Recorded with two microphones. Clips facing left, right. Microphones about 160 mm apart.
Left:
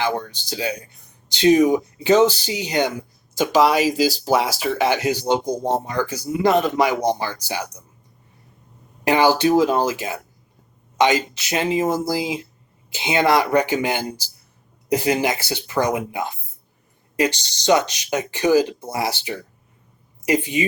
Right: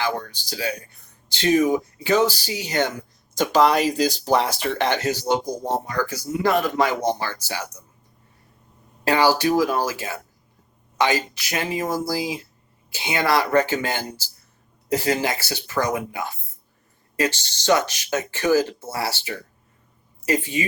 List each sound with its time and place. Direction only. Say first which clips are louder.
0.0 s speech: left 3 dB; 20° left (ahead or behind)
9.0 s speech: left 2 dB; 20° left (ahead or behind)